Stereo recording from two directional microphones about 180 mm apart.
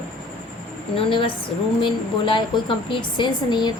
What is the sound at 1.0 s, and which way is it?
A woman's voice, 30° left (ahead or behind).